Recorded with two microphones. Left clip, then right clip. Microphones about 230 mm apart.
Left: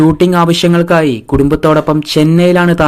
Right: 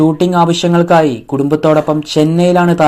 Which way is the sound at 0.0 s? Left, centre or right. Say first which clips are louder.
Left 1 dB; left.